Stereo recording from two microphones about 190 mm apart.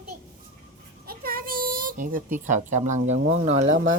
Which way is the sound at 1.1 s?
50° right (ahead or behind).